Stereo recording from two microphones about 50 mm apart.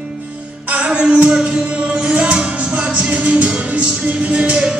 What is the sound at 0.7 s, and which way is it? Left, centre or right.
Music, right.